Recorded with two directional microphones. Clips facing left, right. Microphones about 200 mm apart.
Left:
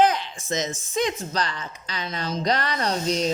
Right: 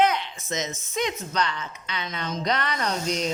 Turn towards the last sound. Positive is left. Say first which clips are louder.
# left 3 dB
turn(degrees=35)  # may be behind; listen again after turning